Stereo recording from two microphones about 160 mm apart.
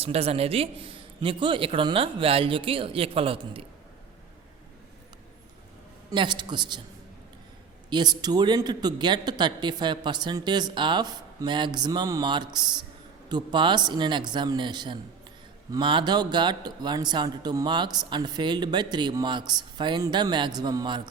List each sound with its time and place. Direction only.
0.0 s a man's voice: 40° right (ahead or behind)
6.1 s speech: 30° right (ahead or behind)
7.9 s speech: 25° right (ahead or behind)